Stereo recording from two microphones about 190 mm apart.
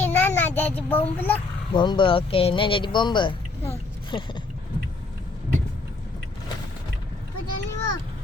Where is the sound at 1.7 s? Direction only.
25° left (ahead or behind).